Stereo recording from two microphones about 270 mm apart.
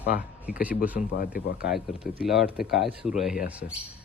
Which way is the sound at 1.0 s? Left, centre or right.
Left.